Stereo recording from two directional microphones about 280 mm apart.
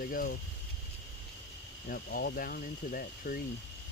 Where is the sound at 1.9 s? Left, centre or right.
Left.